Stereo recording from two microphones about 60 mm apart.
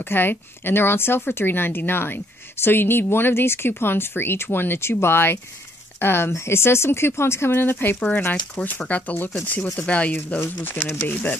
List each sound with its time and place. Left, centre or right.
0.0 s a woman's voice: left
10.3 s a woman's voice: left